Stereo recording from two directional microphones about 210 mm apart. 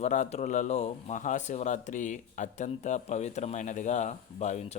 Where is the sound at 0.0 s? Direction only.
35° left (ahead or behind).